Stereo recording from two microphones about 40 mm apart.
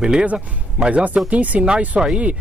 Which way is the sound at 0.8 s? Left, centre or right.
Right.